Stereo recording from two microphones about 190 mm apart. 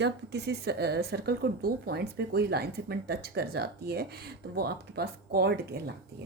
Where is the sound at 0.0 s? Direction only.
60° right (ahead or behind).